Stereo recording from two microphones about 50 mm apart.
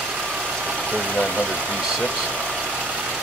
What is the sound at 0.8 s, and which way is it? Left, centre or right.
Vehicle, right.